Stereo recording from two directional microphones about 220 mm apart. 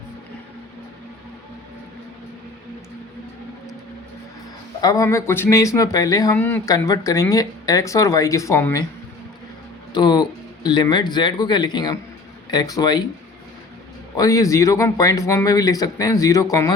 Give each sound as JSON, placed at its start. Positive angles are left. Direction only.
{"t": 4.8, "sound": "speech", "side_deg": 15}
{"t": 9.9, "sound": "speech", "side_deg": 20}
{"t": 14.2, "sound": "speech", "side_deg": 15}